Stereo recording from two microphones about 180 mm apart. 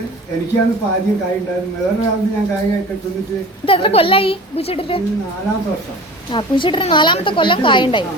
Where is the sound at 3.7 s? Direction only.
30° left (ahead or behind).